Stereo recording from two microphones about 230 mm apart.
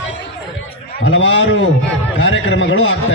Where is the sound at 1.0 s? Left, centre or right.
Left.